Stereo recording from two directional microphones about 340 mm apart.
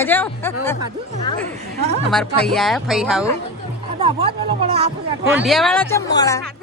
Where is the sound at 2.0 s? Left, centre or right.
Centre.